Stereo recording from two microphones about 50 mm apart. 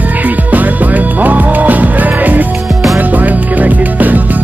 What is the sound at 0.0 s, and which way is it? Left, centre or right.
Music, right.